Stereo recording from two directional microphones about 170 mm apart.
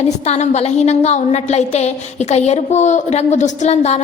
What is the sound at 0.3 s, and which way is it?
A woman's voice, 40° left (ahead or behind).